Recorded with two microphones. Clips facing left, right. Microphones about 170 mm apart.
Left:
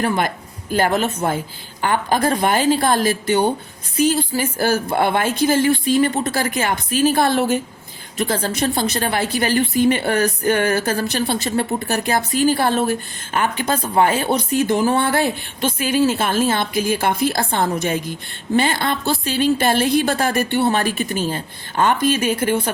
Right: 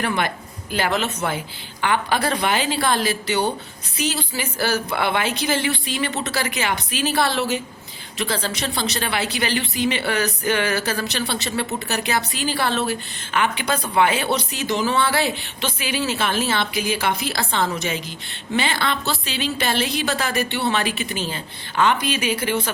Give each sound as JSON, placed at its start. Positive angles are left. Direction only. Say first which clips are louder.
{"t": 0.7, "sound": "speech", "louder": "left 4 dB", "side_deg": 45}